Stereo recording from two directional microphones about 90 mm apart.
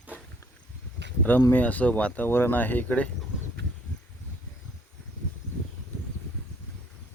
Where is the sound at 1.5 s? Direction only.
15° left (ahead or behind).